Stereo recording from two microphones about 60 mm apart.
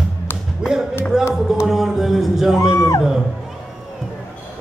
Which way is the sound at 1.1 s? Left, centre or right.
Centre.